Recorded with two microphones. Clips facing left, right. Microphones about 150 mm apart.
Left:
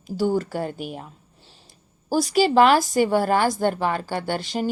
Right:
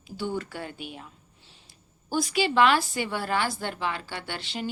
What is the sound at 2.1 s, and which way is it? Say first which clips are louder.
Speech: left 7 dB; 40° left (ahead or behind).